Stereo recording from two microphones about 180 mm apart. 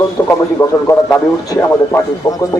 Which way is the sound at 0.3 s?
15° left (ahead or behind).